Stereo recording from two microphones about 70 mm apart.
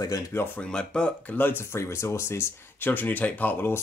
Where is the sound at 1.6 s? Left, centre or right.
Left.